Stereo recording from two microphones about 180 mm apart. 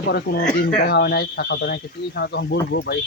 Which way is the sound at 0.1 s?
65° left (ahead or behind).